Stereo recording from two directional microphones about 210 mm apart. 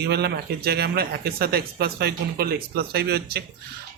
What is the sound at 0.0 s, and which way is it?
Speech, 50° right (ahead or behind).